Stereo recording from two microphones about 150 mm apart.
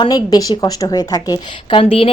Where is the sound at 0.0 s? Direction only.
25° left (ahead or behind).